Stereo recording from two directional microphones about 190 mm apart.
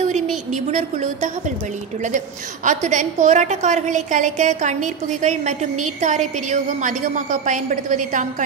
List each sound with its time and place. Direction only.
0.0 s a woman's voice: 40° right (ahead or behind)